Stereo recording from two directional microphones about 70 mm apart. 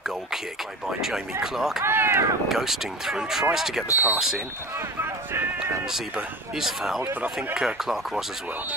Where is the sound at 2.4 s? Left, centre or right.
Centre.